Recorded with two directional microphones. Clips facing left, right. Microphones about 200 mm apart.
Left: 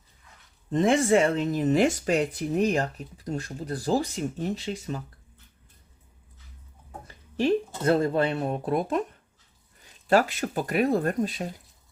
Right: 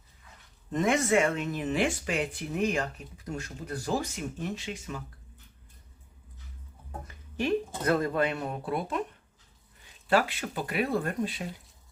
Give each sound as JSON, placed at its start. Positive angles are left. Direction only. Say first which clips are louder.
{"t": 0.7, "sound": "speech", "louder": "left 4 dB", "side_deg": 30}
{"t": 7.1, "sound": "a sound", "louder": "left 6 dB", "side_deg": 30}
{"t": 7.9, "sound": "speech", "louder": "left 4 dB", "side_deg": 30}
{"t": 10.1, "sound": "speech", "louder": "left 4 dB", "side_deg": 40}